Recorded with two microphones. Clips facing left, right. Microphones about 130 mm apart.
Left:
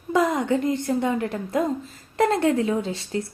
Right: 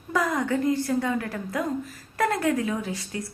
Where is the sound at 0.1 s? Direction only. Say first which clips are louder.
Left 4 dB; 25° left (ahead or behind).